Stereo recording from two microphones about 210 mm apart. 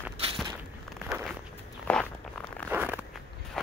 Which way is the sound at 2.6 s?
10° right (ahead or behind).